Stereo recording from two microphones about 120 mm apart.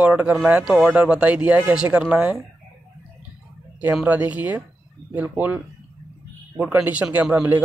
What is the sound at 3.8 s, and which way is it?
A man's voice, 10° right (ahead or behind).